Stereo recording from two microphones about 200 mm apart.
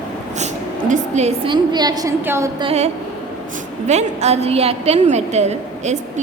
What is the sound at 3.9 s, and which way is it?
A woman's voice, 35° right (ahead or behind).